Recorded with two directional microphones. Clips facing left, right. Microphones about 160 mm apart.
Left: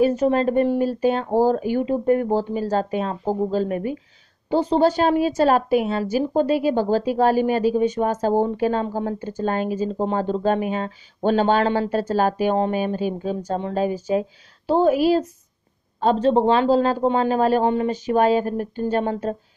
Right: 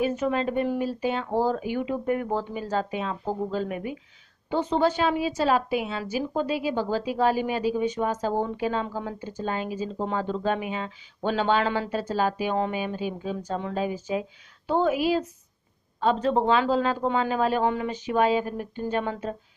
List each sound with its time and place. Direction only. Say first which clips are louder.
0.0 s a woman's voice: left 7 dB; 40° left (ahead or behind)